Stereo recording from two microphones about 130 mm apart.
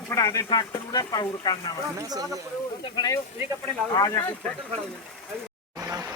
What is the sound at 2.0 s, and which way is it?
Speech, 25° right (ahead or behind).